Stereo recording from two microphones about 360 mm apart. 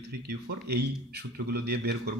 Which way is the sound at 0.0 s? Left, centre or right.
Right.